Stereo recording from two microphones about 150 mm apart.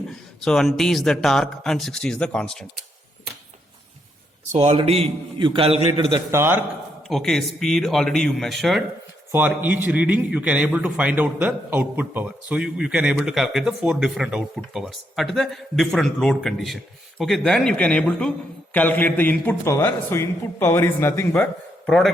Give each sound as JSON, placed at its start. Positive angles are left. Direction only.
{"t": 0.1, "sound": "speech", "side_deg": 5}
{"t": 4.5, "sound": "a man's voice", "side_deg": -45}
{"t": 6.3, "sound": "a man's voice", "side_deg": -15}
{"t": 7.1, "sound": "speech", "side_deg": 0}
{"t": 9.3, "sound": "a man's voice", "side_deg": -15}
{"t": 21.8, "sound": "a man's voice", "side_deg": 0}